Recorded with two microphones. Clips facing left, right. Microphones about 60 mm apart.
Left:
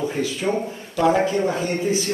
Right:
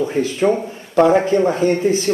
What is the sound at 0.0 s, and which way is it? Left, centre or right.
Speech, right.